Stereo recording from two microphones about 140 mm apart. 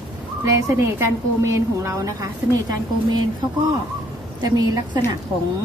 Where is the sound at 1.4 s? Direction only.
20° right (ahead or behind).